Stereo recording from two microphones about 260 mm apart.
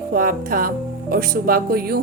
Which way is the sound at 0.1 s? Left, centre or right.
Right.